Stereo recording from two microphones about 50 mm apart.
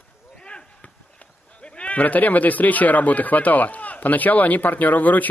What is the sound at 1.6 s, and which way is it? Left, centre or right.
Speech, left.